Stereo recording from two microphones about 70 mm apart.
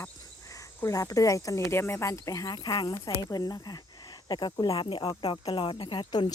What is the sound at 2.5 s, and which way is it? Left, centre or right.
Speech, left.